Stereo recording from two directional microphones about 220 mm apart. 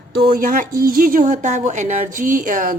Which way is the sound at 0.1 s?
45° right (ahead or behind).